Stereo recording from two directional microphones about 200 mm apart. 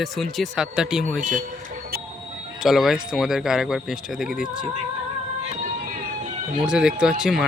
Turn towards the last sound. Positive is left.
turn(degrees=0)  # may be behind; listen again after turning